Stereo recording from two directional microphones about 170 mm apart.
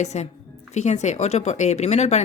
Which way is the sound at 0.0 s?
40° left (ahead or behind).